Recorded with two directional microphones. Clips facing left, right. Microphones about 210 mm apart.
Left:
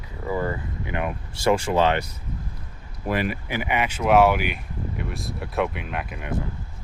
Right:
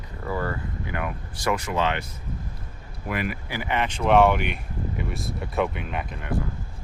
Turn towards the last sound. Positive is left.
turn(degrees=0)  # may be behind; listen again after turning